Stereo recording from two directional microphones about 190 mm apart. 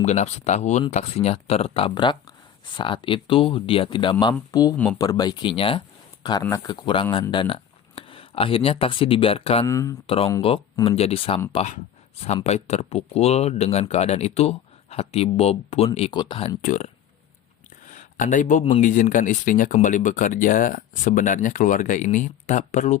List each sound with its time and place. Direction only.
0.0 s speech: 35° left (ahead or behind)
6.4 s speech: 15° left (ahead or behind)
9.6 s speech: 15° left (ahead or behind)
10.9 s speech: 30° left (ahead or behind)
16.6 s speech: 45° left (ahead or behind)
17.8 s a sound: 40° left (ahead or behind)
18.8 s speech: 40° left (ahead or behind)